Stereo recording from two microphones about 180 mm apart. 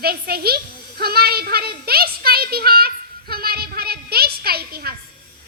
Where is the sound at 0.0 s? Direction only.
60° right (ahead or behind).